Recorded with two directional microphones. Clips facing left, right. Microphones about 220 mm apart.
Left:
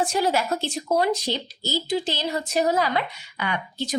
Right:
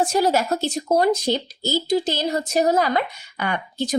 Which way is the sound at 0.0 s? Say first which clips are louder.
Right 4 dB; 40° right (ahead or behind).